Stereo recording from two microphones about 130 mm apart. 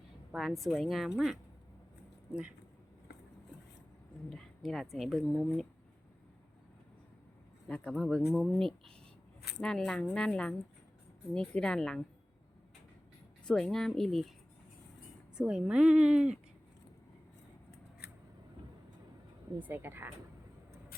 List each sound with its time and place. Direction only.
0.3 s a woman's voice: centre (ahead or behind)
4.3 s a woman's voice: centre (ahead or behind)
7.7 s a woman's voice: 5° left (ahead or behind)
13.4 s a woman's voice: 5° left (ahead or behind)
15.4 s a woman's voice: 5° right (ahead or behind)
19.5 s a woman's voice: 15° right (ahead or behind)